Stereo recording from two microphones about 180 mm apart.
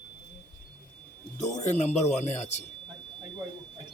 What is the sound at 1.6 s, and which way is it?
A man's voice, 40° left (ahead or behind).